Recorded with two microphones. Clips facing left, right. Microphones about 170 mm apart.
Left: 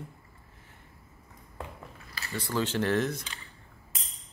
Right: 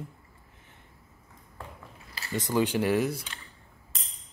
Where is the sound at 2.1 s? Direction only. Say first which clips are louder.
Right 4 dB; 20° right (ahead or behind).